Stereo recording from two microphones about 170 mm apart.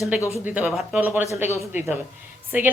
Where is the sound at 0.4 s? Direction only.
10° right (ahead or behind).